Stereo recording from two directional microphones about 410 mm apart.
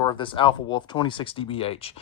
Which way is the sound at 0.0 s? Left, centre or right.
Centre.